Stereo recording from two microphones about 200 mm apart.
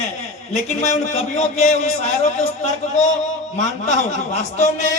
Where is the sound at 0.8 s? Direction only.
35° left (ahead or behind).